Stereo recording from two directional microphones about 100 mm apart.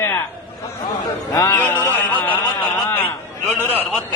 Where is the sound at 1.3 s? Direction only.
25° left (ahead or behind).